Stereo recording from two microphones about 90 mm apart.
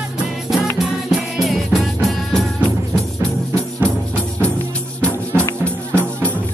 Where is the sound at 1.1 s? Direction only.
Centre (ahead or behind).